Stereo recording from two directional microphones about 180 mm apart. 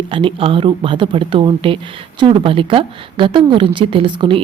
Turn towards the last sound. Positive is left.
turn(degrees=-30)  # may be behind; listen again after turning